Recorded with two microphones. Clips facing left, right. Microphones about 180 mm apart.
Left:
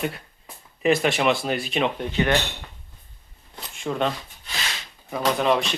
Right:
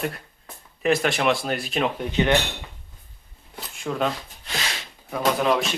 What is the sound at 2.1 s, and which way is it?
Speech, 20° right (ahead or behind).